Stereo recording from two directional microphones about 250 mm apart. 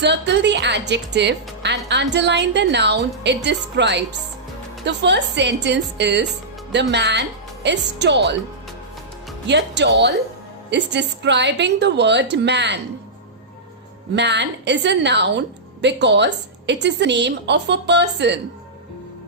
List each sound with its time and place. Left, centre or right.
0.0 s a woman's voice: right
9.5 s a woman's voice: right
14.2 s a woman's voice: right